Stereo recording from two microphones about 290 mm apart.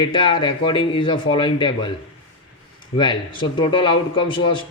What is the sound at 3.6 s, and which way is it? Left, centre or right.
A man's voice, centre.